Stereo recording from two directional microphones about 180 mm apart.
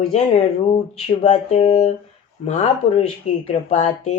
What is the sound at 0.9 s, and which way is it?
Speech, 35° left (ahead or behind).